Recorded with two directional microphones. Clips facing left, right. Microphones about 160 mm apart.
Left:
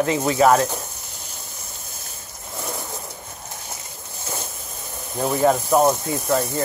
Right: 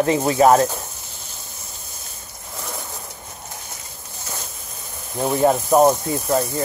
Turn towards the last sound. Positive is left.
turn(degrees=-15)  # may be behind; listen again after turning